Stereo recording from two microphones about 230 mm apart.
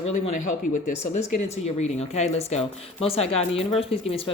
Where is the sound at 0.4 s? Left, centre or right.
Left.